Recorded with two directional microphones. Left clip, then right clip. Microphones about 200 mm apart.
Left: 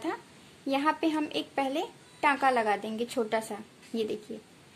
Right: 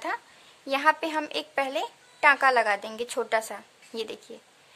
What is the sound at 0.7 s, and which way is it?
A woman's voice, 35° right (ahead or behind).